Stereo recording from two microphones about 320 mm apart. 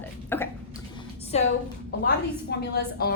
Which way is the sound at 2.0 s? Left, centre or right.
Left.